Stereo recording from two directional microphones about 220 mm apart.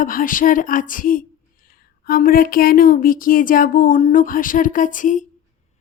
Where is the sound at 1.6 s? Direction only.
40° left (ahead or behind).